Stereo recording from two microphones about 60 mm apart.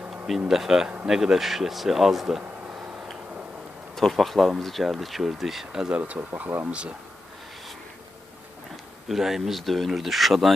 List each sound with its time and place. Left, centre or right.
0.1 s speech: centre
0.9 s speech: centre
1.1 s speech: centre
3.9 s speech: centre
6.0 s speech: right
8.7 s a sound: centre
9.4 s speech: centre